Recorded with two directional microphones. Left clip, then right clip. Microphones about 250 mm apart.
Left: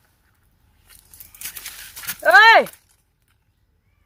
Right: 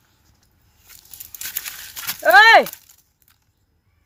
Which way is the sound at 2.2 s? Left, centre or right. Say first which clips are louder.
Right 1 dB; centre.